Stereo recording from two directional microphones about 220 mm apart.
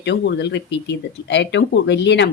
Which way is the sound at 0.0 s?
50° left (ahead or behind).